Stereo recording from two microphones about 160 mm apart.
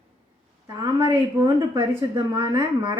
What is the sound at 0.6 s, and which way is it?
A woman's voice, 20° right (ahead or behind).